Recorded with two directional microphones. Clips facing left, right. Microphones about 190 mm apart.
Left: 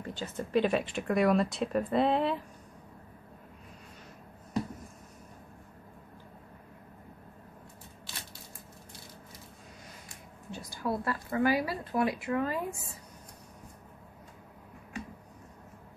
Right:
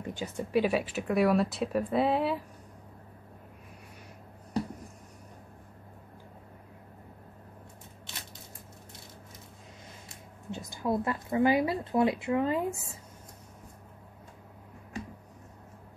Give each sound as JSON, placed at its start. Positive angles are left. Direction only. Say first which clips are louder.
{"t": 0.0, "sound": "speech", "louder": "right 2 dB", "side_deg": -15}
{"t": 10.0, "sound": "speech", "louder": "right 6 dB", "side_deg": -20}